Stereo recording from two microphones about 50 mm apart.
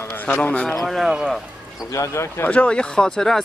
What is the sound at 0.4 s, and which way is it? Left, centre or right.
Speech, centre.